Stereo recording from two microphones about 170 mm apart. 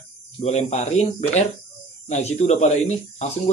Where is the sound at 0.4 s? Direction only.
40° left (ahead or behind).